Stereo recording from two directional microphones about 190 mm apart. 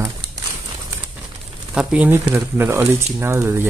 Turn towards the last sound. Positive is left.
turn(degrees=-15)  # may be behind; listen again after turning